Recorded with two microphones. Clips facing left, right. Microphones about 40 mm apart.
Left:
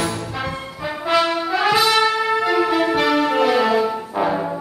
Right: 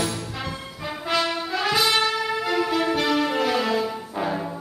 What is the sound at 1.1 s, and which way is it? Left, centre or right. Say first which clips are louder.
Brass instrument: left 6 dB; centre.